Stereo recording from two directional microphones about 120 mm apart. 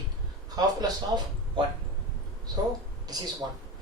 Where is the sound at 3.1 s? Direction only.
35° right (ahead or behind).